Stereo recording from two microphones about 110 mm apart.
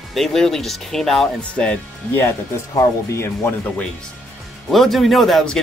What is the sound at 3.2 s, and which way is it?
Speech, 20° left (ahead or behind).